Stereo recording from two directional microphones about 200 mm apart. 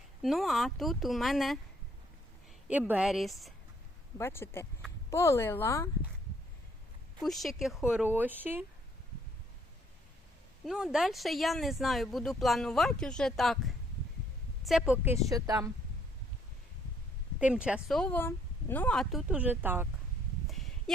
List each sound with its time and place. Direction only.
0.2 s speech: centre (ahead or behind)
2.6 s speech: 5° right (ahead or behind)
4.2 s speech: 10° left (ahead or behind)
7.2 s speech: centre (ahead or behind)
10.7 s a woman's voice: centre (ahead or behind)
17.4 s speech: 5° right (ahead or behind)
20.5 s a sound: centre (ahead or behind)